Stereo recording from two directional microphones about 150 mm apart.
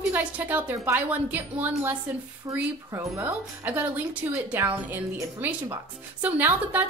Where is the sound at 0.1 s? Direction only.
10° right (ahead or behind).